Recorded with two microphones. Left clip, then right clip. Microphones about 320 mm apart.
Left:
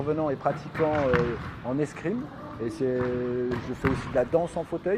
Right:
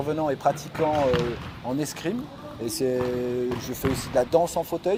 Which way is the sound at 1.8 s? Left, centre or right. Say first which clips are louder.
Left 2 dB; right.